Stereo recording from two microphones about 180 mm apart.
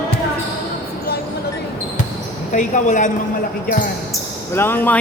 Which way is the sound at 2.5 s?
45° left (ahead or behind).